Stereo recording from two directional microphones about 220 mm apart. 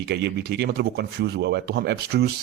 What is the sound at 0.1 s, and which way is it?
Speech, 50° right (ahead or behind).